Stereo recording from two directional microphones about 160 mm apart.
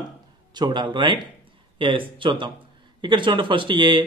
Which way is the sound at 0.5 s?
25° right (ahead or behind).